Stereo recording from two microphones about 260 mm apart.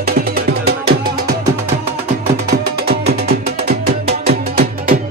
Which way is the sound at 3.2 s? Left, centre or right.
Right.